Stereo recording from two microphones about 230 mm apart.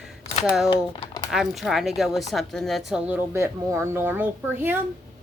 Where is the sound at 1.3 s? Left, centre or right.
Centre.